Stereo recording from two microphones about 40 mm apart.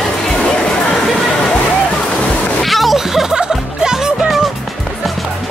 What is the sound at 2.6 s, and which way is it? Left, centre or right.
Music, centre.